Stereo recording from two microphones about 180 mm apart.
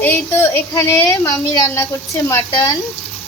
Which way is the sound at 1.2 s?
20° left (ahead or behind).